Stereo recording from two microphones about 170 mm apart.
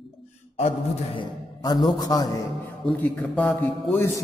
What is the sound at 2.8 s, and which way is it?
Speech, 5° left (ahead or behind).